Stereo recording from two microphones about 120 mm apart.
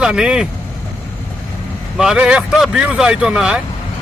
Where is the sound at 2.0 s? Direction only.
5° right (ahead or behind).